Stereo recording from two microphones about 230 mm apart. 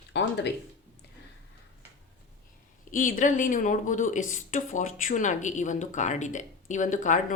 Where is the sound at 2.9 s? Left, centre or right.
Left.